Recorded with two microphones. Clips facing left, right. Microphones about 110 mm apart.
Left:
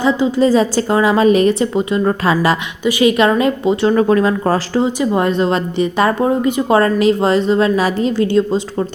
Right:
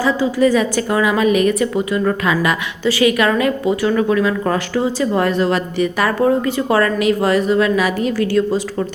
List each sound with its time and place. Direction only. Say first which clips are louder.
0.0 s a woman's voice: left 1 dB; 25° left (ahead or behind)
3.9 s speech: left 3 dB; 40° left (ahead or behind)
4.9 s a woman's voice: left 1 dB; 20° left (ahead or behind)